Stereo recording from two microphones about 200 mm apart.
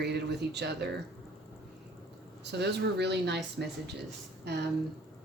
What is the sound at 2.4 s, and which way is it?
Speech, 55° right (ahead or behind).